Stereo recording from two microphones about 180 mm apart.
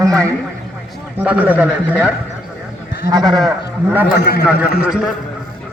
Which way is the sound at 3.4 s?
5° right (ahead or behind).